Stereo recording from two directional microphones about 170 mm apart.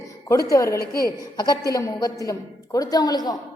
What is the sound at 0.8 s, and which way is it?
Speech, 65° left (ahead or behind).